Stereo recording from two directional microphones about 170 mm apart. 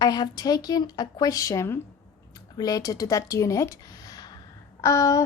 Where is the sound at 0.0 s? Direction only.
20° left (ahead or behind).